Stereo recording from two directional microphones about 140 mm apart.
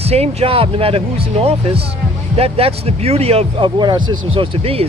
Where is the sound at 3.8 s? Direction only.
30° right (ahead or behind).